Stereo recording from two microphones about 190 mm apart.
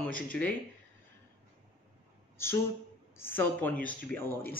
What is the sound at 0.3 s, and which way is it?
Speech, 5° left (ahead or behind).